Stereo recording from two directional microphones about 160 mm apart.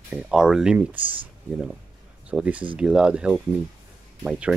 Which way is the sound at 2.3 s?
10° right (ahead or behind).